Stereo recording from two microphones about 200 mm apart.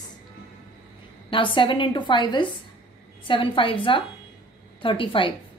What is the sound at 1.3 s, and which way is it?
A woman's voice, 25° left (ahead or behind).